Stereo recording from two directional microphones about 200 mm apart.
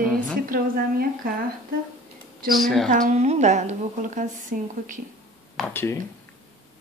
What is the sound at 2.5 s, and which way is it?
Speech, centre (ahead or behind).